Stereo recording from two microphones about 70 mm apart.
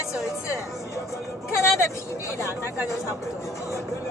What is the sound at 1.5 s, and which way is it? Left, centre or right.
Speech, left.